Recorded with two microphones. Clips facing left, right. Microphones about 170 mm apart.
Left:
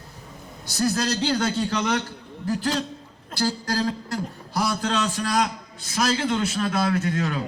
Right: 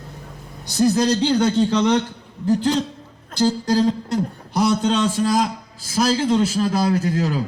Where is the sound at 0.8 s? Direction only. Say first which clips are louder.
Right 7 dB; 15° right (ahead or behind).